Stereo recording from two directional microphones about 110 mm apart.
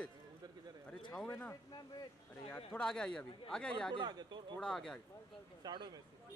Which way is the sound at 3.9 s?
40° right (ahead or behind).